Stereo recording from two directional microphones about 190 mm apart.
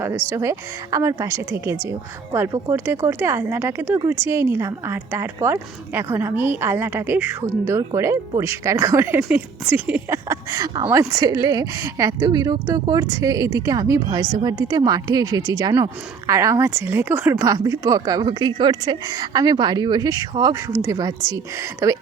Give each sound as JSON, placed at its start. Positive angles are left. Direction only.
{"t": 0.3, "sound": "speech", "side_deg": -15}